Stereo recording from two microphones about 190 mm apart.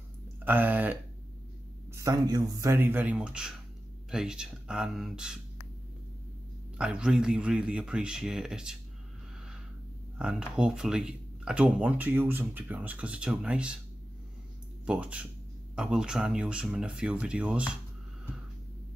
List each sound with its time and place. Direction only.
0.5 s speech: 10° right (ahead or behind)
2.0 s speech: 20° right (ahead or behind)
6.8 s speech: 5° right (ahead or behind)
10.1 s speech: 5° right (ahead or behind)
14.9 s speech: 5° right (ahead or behind)